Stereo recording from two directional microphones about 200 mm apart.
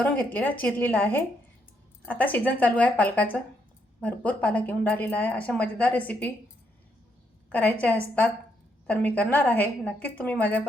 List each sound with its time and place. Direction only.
0.0 s speech: 10° left (ahead or behind)
7.5 s speech: 10° left (ahead or behind)